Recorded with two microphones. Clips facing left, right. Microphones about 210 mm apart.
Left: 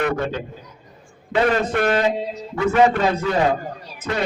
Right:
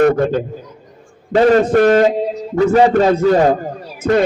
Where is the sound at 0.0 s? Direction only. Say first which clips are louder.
Right 10 dB; 45° right (ahead or behind).